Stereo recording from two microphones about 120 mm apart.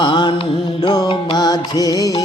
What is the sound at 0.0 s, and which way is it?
Music, 40° left (ahead or behind).